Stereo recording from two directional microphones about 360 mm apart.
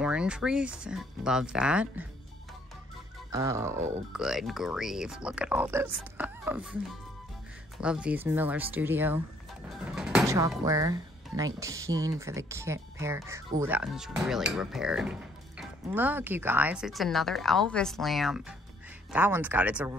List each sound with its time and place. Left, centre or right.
0.0 s speech: centre
3.3 s speech: centre
7.8 s speech: centre